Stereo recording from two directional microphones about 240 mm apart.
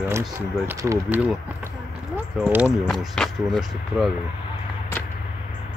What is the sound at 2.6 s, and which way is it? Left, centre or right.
Speech, centre.